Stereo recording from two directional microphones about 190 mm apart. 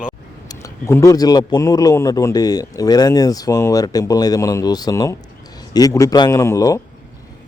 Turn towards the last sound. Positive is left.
turn(degrees=15)  # may be behind; listen again after turning